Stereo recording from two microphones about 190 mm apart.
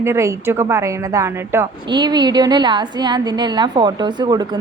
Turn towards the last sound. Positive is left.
turn(degrees=-20)  # may be behind; listen again after turning